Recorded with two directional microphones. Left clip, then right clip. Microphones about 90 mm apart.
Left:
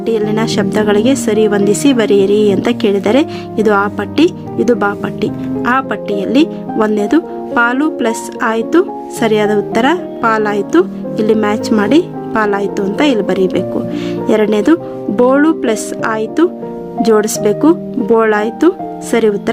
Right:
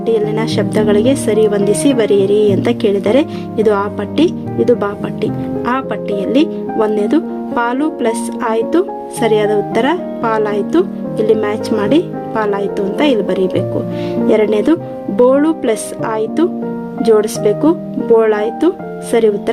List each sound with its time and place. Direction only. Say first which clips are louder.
0.0 s speech: even; 35° left (ahead or behind)
4.9 s speech: left 2 dB; 25° left (ahead or behind)